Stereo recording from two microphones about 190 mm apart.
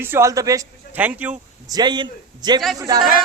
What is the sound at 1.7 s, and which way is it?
A man's voice, 20° right (ahead or behind).